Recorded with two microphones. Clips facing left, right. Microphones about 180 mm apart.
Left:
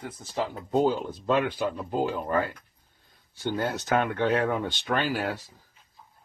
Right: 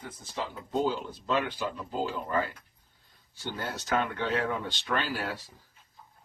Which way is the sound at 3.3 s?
55° left (ahead or behind).